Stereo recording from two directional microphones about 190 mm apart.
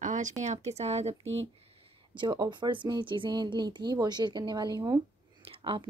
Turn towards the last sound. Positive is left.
turn(degrees=-25)  # may be behind; listen again after turning